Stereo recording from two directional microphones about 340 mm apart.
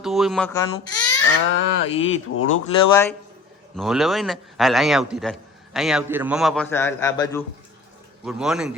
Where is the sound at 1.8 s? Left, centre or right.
Left.